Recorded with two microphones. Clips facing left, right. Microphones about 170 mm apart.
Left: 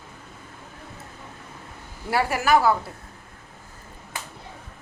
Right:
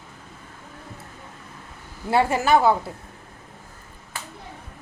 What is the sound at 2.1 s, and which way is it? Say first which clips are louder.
Speech: right 2 dB; 25° right (ahead or behind).